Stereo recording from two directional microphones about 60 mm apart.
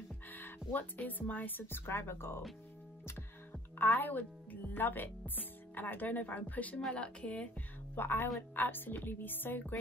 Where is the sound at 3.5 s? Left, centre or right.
Left.